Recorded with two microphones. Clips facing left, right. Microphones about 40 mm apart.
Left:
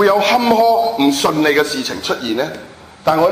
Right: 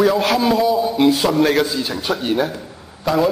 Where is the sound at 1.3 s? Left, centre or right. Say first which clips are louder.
Left 2 dB; centre.